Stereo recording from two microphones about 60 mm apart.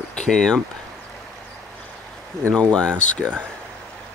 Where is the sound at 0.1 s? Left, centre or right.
Centre.